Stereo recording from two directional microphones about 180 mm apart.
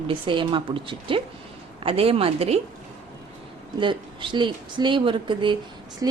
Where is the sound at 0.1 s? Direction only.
30° right (ahead or behind).